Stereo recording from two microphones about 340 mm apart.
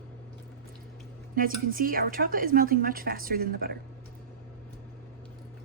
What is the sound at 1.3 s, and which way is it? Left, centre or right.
A woman's voice, right.